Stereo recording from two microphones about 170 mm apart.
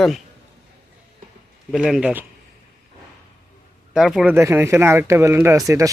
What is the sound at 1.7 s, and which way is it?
Speech, 5° right (ahead or behind).